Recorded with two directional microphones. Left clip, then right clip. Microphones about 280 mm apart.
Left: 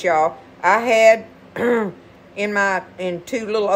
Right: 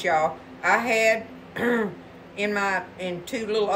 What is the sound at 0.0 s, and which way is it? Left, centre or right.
A man's voice, left.